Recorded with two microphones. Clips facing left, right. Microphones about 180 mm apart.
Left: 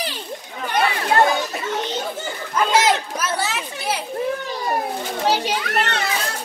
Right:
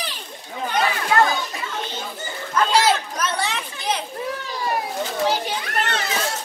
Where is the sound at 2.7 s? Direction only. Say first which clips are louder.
Left 1 dB; 20° left (ahead or behind).